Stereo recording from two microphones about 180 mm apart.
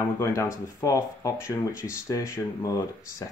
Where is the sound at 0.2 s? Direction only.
15° left (ahead or behind).